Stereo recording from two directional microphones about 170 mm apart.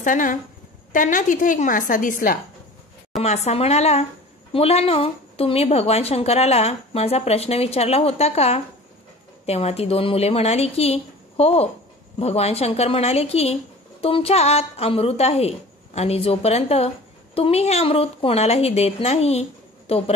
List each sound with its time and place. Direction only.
0.0 s a woman's voice: 50° left (ahead or behind)
3.2 s a woman's voice: 40° left (ahead or behind)